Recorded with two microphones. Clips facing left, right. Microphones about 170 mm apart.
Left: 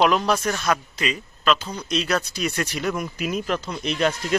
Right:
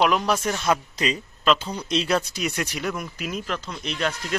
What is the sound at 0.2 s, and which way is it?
Speech, 15° right (ahead or behind).